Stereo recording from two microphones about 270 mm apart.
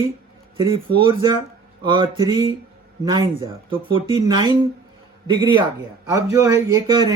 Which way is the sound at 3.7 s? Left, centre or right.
Centre.